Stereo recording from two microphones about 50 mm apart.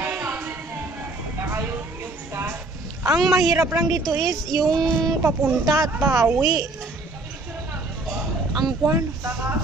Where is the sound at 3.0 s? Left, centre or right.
Centre.